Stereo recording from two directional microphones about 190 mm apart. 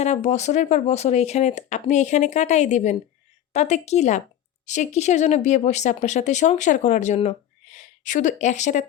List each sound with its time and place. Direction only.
0.0 s speech: 35° left (ahead or behind)